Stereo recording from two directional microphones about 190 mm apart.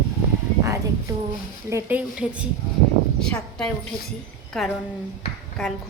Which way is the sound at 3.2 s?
5° left (ahead or behind).